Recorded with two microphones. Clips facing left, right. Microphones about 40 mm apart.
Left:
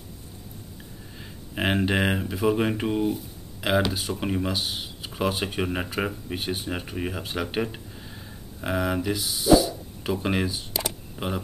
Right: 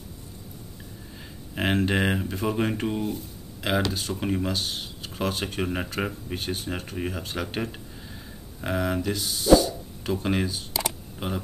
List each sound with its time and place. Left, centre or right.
1.5 s speech: centre